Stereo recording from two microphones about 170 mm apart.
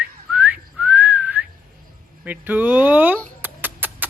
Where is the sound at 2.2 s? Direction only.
10° right (ahead or behind).